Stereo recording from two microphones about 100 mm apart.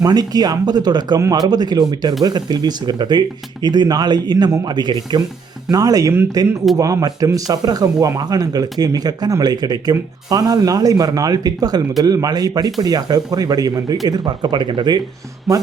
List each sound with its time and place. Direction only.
0.0 s speech: 40° right (ahead or behind)